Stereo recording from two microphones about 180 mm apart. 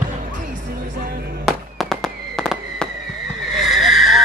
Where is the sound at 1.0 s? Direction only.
60° right (ahead or behind).